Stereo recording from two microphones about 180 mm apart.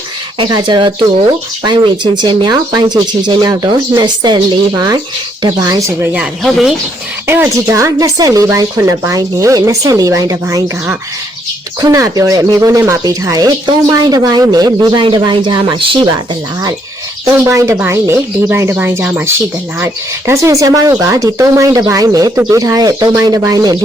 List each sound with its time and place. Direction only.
0.3 s speech: 25° right (ahead or behind)
6.1 s speech: centre (ahead or behind); by 16.0 s 25° right (ahead or behind)
17.2 s speech: 15° right (ahead or behind)